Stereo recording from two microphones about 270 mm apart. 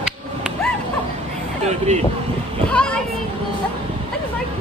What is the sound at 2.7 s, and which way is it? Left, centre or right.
Children playing, centre.